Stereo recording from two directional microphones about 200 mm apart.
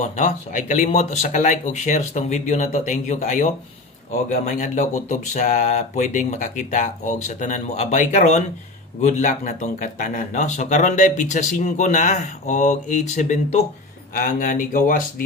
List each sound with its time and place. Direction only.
0.0 s speech: 40° left (ahead or behind)